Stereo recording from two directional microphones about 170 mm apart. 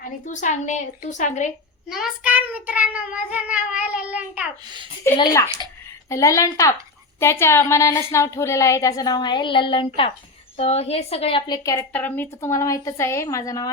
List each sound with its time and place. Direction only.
0.0 s a woman's voice: 45° left (ahead or behind)
1.9 s speech: centre (ahead or behind)
4.6 s a child's voice: 25° right (ahead or behind)
5.1 s a woman's voice: 20° left (ahead or behind)